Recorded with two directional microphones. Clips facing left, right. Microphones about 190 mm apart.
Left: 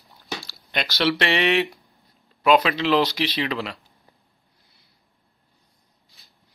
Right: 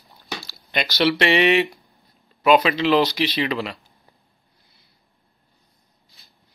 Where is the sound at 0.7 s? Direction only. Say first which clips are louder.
Right 3 dB; 5° right (ahead or behind).